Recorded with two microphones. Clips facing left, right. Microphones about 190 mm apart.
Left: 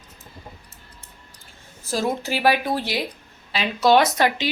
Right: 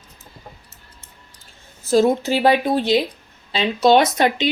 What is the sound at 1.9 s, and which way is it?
A woman's voice, 25° right (ahead or behind).